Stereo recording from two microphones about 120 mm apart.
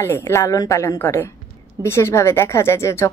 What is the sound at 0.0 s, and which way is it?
A woman's voice, 20° left (ahead or behind).